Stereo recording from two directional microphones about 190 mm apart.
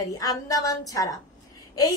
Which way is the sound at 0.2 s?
20° left (ahead or behind).